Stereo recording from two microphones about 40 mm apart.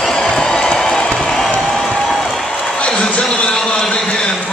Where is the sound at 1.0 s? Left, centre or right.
Left.